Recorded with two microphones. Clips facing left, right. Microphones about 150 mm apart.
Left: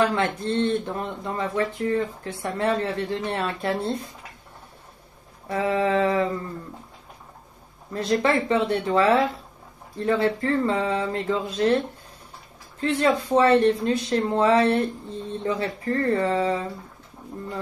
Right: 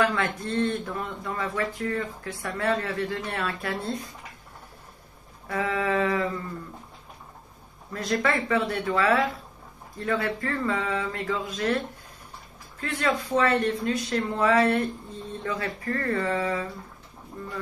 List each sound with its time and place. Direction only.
0.1 s speech: 25° left (ahead or behind)
5.5 s speech: 30° left (ahead or behind)
7.9 s speech: 30° left (ahead or behind)
12.8 s speech: 25° left (ahead or behind)